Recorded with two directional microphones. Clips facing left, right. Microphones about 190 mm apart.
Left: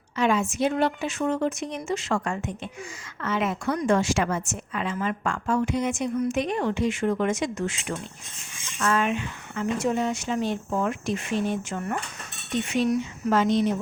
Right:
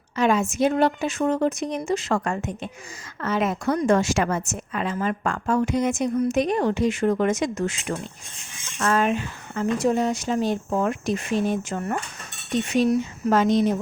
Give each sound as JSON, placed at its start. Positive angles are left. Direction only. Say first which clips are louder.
{"t": 0.2, "sound": "speech", "louder": "right 3 dB", "side_deg": -40}